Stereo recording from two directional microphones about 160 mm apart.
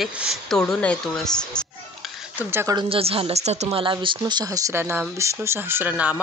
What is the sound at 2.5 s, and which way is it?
Speech, 15° right (ahead or behind).